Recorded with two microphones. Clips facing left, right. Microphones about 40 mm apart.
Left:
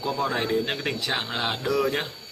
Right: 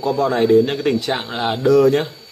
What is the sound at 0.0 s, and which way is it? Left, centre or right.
Speech, centre.